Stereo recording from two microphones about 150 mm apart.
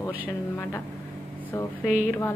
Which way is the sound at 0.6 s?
15° left (ahead or behind).